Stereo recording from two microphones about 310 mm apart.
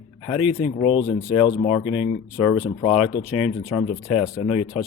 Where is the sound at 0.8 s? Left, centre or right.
Centre.